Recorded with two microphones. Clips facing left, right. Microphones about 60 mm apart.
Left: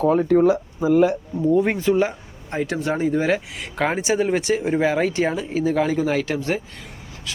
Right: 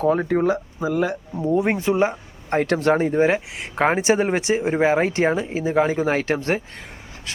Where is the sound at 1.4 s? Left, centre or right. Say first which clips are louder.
Left 1 dB; right.